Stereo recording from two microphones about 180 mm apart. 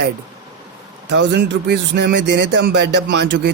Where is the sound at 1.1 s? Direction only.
75° right (ahead or behind).